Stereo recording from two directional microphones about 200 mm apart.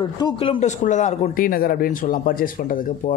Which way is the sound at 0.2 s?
25° left (ahead or behind).